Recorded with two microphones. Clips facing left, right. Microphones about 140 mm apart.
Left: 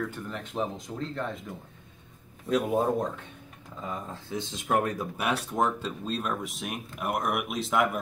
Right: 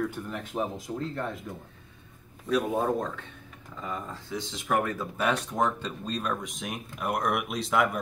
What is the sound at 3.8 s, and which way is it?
Speech, 20° left (ahead or behind).